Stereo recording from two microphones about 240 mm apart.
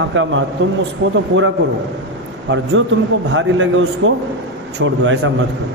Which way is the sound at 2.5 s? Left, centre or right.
Right.